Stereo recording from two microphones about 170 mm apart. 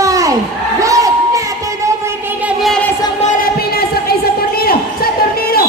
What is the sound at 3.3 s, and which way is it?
Music, 65° left (ahead or behind).